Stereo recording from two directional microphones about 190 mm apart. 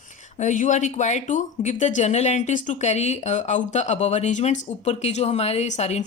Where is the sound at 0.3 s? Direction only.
40° left (ahead or behind).